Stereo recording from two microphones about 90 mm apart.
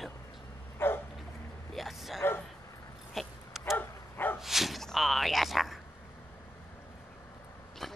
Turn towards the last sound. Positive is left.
turn(degrees=5)  # may be behind; listen again after turning